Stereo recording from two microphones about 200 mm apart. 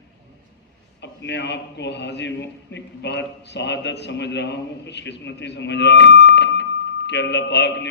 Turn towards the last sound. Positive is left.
turn(degrees=60)  # may be behind; listen again after turning